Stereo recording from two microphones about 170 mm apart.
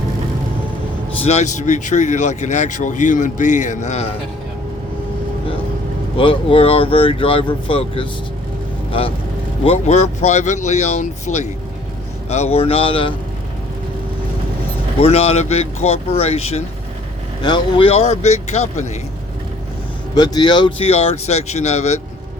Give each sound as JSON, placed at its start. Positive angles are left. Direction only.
{"t": 1.2, "sound": "speech", "side_deg": 40}
{"t": 6.1, "sound": "speech", "side_deg": 30}
{"t": 15.0, "sound": "speech", "side_deg": 35}
{"t": 20.1, "sound": "speech", "side_deg": 25}